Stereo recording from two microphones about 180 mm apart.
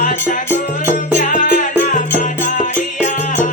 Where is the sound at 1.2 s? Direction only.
45° left (ahead or behind).